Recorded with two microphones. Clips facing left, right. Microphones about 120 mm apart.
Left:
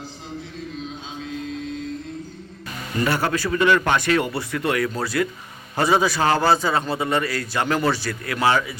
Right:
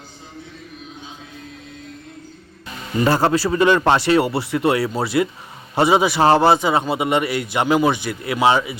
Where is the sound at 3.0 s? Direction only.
35° right (ahead or behind).